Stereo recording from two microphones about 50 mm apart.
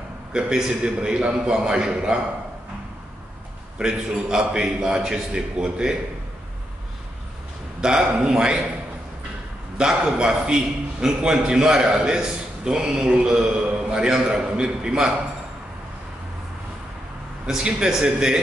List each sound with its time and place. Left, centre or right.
0.3 s a man's voice: centre
3.7 s a man's voice: centre
7.8 s a man's voice: centre
9.8 s a man's voice: centre
17.5 s a man's voice: centre